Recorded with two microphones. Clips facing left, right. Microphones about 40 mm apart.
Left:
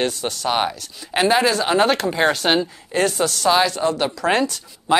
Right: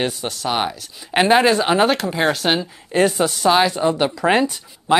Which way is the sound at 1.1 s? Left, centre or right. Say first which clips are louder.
Right 3 dB; right.